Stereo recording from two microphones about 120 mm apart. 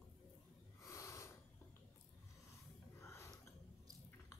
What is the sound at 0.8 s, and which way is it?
Snort, 25° left (ahead or behind).